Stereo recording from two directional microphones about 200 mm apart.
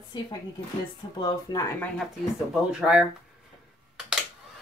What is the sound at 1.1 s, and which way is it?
Speech, 20° left (ahead or behind).